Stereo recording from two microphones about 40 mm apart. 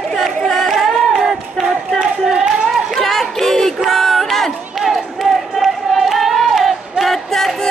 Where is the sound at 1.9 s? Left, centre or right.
Centre.